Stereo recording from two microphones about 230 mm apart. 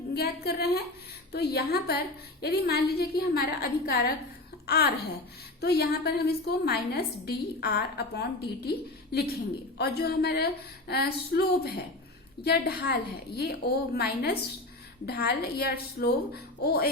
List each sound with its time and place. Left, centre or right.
0.1 s a woman's voice: left
9.7 s a woman's voice: left